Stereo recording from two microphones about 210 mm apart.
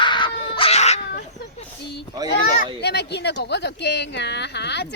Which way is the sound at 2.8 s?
50° left (ahead or behind).